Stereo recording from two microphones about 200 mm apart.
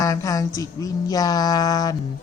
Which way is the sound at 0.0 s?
15° left (ahead or behind).